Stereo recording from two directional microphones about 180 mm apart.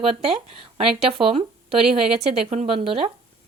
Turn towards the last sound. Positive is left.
turn(degrees=-30)  # may be behind; listen again after turning